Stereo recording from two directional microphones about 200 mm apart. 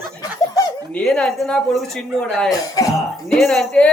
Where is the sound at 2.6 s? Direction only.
20° left (ahead or behind).